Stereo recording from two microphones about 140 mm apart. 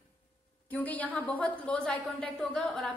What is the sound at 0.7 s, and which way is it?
A woman's voice, 10° left (ahead or behind).